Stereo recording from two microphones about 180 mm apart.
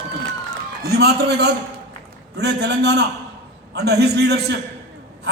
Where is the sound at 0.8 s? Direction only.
65° right (ahead or behind).